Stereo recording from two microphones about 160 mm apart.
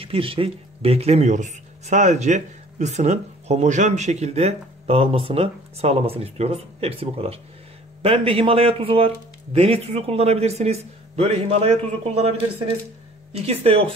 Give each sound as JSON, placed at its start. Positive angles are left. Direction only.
{"t": 0.0, "sound": "speech", "side_deg": -35}
{"t": 13.5, "sound": "speech", "side_deg": -40}